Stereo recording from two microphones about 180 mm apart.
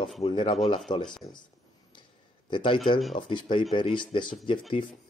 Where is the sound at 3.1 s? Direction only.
25° left (ahead or behind).